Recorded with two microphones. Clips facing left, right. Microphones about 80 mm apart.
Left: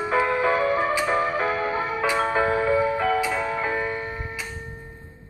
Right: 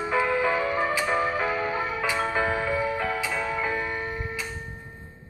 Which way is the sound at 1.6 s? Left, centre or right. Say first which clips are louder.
Left 2 dB; centre.